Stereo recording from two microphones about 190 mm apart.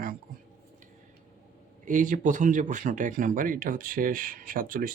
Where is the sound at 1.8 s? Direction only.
45° right (ahead or behind).